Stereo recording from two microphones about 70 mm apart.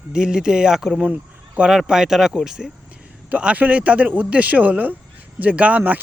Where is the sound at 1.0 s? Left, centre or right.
Right.